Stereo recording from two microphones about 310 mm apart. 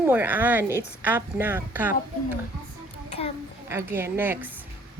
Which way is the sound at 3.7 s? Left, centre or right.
Centre.